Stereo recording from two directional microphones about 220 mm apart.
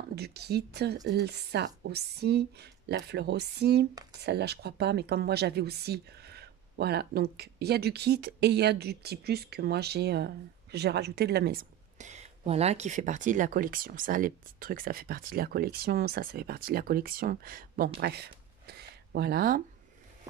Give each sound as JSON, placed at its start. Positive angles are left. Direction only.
{"t": 0.1, "sound": "speech", "side_deg": -45}
{"t": 12.0, "sound": "speech", "side_deg": -30}